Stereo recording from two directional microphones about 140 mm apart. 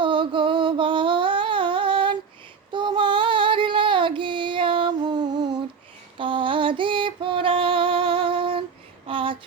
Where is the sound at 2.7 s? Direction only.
35° right (ahead or behind).